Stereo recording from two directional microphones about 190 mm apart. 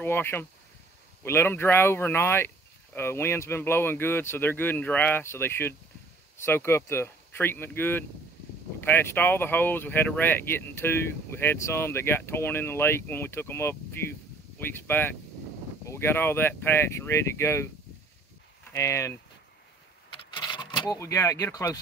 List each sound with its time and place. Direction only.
0.0 s speech: 10° left (ahead or behind)
18.7 s speech: 15° left (ahead or behind)
20.1 s a sound: 25° left (ahead or behind)